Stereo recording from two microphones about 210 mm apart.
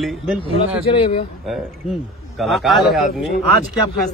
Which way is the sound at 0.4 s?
25° left (ahead or behind).